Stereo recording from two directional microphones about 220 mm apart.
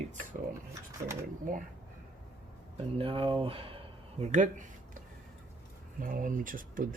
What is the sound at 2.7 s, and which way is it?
Speech, 25° right (ahead or behind).